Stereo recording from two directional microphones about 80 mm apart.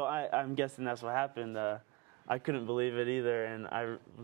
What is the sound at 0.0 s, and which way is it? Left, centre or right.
Speech, right.